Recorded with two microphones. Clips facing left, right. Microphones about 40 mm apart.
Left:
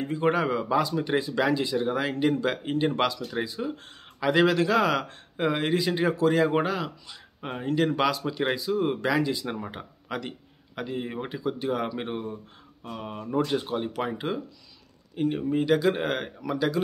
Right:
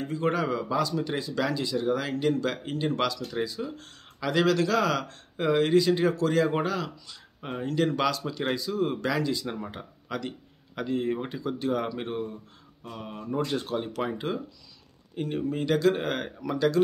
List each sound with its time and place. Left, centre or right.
0.0 s speech: left